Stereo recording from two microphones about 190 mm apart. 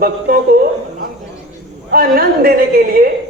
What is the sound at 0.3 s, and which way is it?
Speech, 50° right (ahead or behind).